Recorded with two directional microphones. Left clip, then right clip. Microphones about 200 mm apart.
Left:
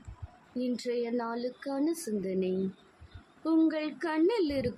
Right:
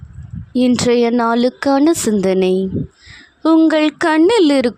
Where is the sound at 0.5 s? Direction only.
55° right (ahead or behind).